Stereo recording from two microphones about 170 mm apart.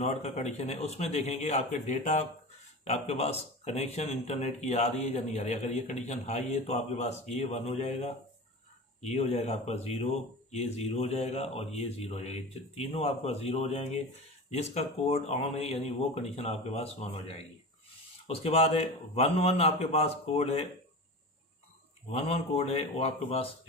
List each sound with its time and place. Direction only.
0.0 s speech: 40° left (ahead or behind)
22.1 s speech: 35° left (ahead or behind)